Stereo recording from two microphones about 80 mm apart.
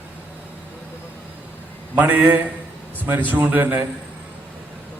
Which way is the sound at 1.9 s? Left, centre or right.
Right.